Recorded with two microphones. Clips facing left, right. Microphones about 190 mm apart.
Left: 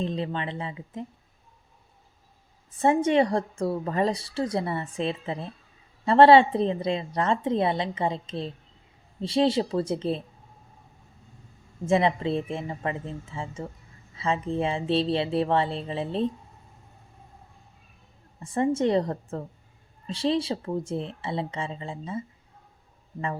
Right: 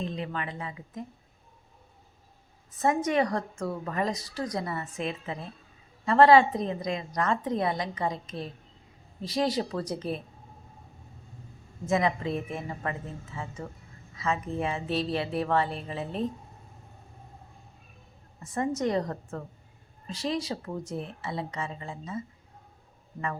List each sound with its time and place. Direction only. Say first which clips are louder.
0.0 s a woman's voice: left 4 dB; 30° left (ahead or behind)
2.7 s a woman's voice: left 4 dB; 30° left (ahead or behind)
11.9 s a woman's voice: left 4 dB; 30° left (ahead or behind)
18.3 s a woman's voice: left 5 dB; 30° left (ahead or behind)